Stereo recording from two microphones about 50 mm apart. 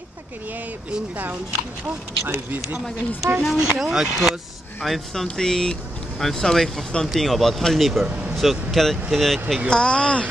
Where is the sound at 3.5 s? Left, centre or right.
Centre.